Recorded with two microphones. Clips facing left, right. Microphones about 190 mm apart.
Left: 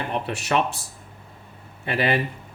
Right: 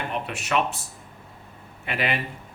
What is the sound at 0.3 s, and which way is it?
Speech, 35° left (ahead or behind).